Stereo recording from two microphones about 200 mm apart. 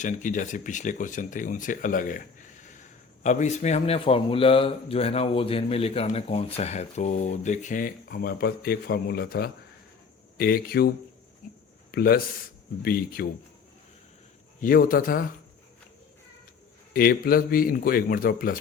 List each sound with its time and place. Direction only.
0.0 s a man's voice: 40° left (ahead or behind)
14.6 s a man's voice: 45° left (ahead or behind)
16.9 s a man's voice: 45° left (ahead or behind)